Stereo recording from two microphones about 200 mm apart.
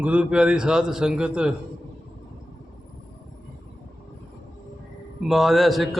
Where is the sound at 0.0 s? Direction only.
5° right (ahead or behind).